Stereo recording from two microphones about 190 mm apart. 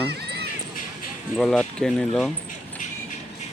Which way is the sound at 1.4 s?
Centre (ahead or behind).